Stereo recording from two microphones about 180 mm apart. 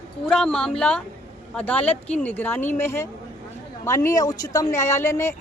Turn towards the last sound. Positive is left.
turn(degrees=15)  # may be behind; listen again after turning